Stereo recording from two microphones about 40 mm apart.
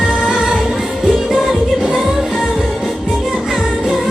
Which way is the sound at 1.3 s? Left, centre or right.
Centre.